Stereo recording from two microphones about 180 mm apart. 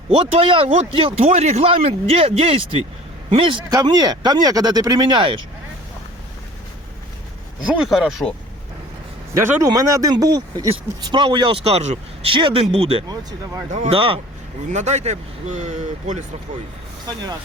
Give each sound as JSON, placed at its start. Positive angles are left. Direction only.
{"t": 0.1, "sound": "speech", "side_deg": -30}
{"t": 7.7, "sound": "speech", "side_deg": 0}
{"t": 9.3, "sound": "speech", "side_deg": -15}
{"t": 13.1, "sound": "speech", "side_deg": -15}
{"t": 13.7, "sound": "speech", "side_deg": -40}